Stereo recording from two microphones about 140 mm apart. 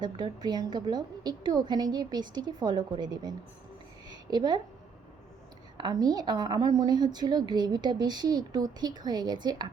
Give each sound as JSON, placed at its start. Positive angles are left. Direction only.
{"t": 0.0, "sound": "a woman's voice", "side_deg": -30}
{"t": 5.7, "sound": "a woman's voice", "side_deg": -30}